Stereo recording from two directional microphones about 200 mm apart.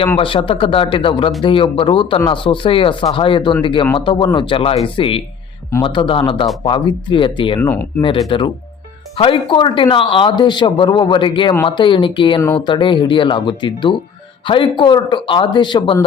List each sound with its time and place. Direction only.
0.2 s speech: 25° left (ahead or behind)